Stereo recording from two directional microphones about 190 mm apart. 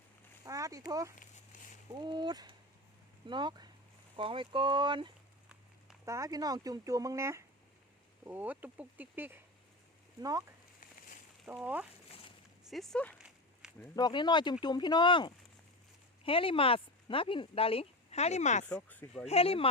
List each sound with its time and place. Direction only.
0.4 s speech: 15° right (ahead or behind)
1.5 s a sound: 40° left (ahead or behind)
2.0 s speech: 25° right (ahead or behind)
11.4 s speech: 10° right (ahead or behind)
13.9 s speech: 25° left (ahead or behind)
18.6 s speech: 10° left (ahead or behind)
19.3 s speech: 30° left (ahead or behind)